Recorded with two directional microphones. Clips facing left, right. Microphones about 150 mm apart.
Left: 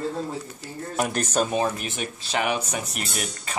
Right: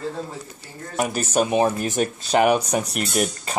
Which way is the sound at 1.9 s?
45° right (ahead or behind).